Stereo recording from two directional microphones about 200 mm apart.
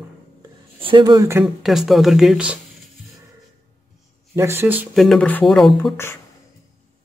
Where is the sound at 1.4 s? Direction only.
Centre (ahead or behind).